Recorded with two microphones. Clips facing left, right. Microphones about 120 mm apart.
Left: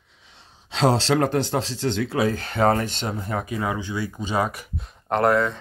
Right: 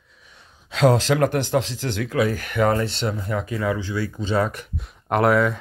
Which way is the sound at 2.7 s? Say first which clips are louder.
Right 2 dB; 45° left (ahead or behind).